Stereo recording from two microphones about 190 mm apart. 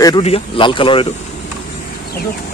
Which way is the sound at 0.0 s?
25° left (ahead or behind).